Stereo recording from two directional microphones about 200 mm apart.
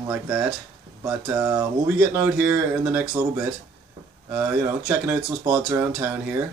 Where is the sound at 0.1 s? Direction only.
5° right (ahead or behind).